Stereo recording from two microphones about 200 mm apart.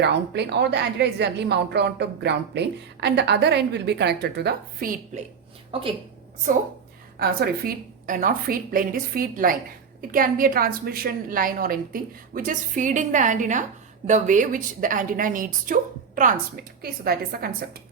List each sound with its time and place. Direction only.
0.0 s a woman's voice: 60° right (ahead or behind)
5.7 s a woman's voice: 25° right (ahead or behind)
7.2 s a woman's voice: 50° right (ahead or behind)